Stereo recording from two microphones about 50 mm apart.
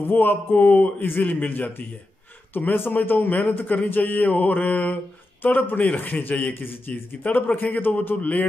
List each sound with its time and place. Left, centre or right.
0.1 s a man's voice: left